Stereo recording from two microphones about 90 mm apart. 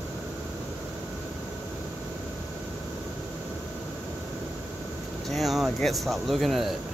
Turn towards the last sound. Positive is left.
turn(degrees=0)  # may be behind; listen again after turning